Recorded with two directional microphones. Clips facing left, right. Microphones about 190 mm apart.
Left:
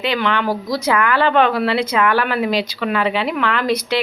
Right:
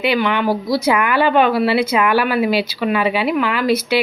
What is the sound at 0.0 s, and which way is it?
Speech, 10° right (ahead or behind).